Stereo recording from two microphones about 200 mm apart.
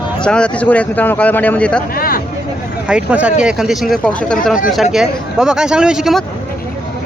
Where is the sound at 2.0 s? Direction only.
45° left (ahead or behind).